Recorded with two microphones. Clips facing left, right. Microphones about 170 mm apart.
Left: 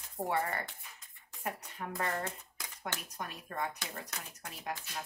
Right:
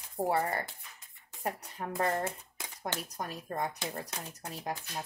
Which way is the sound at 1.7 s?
35° right (ahead or behind).